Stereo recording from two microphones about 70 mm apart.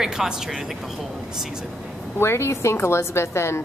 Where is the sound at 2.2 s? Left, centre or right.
Left.